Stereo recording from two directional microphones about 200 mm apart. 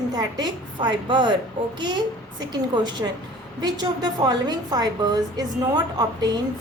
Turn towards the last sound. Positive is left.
turn(degrees=-20)  # may be behind; listen again after turning